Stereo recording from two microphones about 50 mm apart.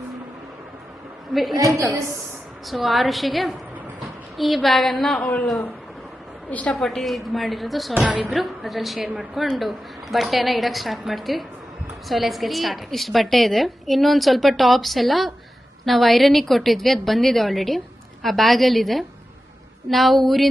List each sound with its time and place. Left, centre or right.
1.3 s a woman's voice: centre
2.6 s a woman's voice: centre
6.5 s a woman's voice: left
6.7 s a woman's voice: centre
7.9 s speech: right
8.3 s a woman's voice: centre